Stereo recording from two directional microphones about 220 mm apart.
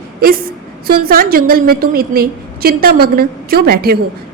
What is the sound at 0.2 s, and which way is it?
A woman's voice, 40° right (ahead or behind).